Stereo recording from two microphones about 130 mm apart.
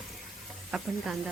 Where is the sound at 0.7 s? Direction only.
Centre (ahead or behind).